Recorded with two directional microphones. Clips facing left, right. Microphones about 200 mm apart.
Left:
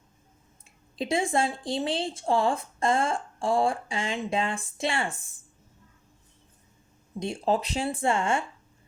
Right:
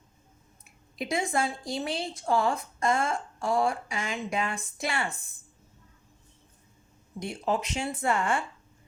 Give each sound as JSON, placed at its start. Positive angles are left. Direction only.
{"t": 0.6, "sound": "speech", "side_deg": 30}
{"t": 7.2, "sound": "speech", "side_deg": 30}